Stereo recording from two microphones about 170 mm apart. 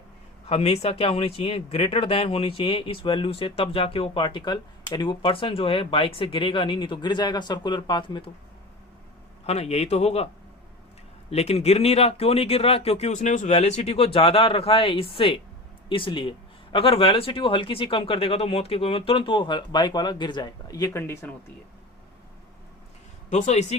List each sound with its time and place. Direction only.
0.4 s speech: 35° left (ahead or behind)
9.5 s speech: 40° left (ahead or behind)
11.3 s speech: 40° left (ahead or behind); by 21.2 s 15° left (ahead or behind)
23.3 s speech: 40° left (ahead or behind)